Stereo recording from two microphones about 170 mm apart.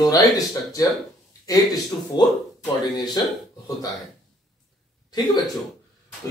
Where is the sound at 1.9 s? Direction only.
15° left (ahead or behind).